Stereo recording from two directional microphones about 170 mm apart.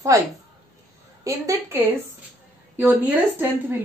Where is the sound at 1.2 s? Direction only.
20° right (ahead or behind).